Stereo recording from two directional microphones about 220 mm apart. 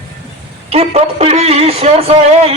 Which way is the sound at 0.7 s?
30° right (ahead or behind).